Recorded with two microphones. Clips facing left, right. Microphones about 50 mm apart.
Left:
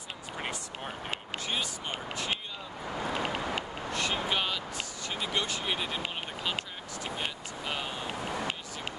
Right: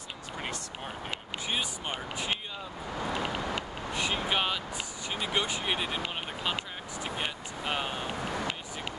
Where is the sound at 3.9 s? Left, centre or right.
Centre.